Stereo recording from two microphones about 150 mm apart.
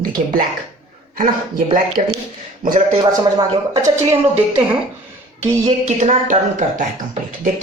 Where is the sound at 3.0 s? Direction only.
30° right (ahead or behind).